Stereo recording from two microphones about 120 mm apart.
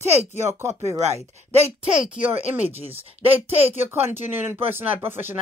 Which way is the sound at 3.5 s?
55° right (ahead or behind).